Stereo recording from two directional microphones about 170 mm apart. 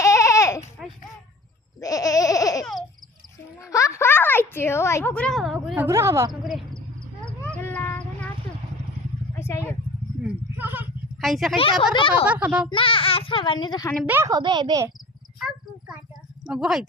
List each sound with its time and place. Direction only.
0.0 s baby cry: 20° left (ahead or behind)
1.8 s baby laughter: 20° left (ahead or behind)
3.6 s speech: 20° left (ahead or behind); by 6.3 s 15° right (ahead or behind)
6.4 s speech: centre (ahead or behind)
7.3 s cat: 10° left (ahead or behind)
9.3 s vehicle: 15° left (ahead or behind)
10.6 s a sound: 10° right (ahead or behind)
11.2 s speech: centre (ahead or behind)
11.5 s a child's voice: 30° left (ahead or behind)
12.2 s a child's voice: 10° right (ahead or behind)
12.7 s a child's voice: 30° left (ahead or behind)
14.1 s a child's voice: 15° right (ahead or behind)
15.4 s a sound: 5° right (ahead or behind)
16.5 s speech: 5° right (ahead or behind)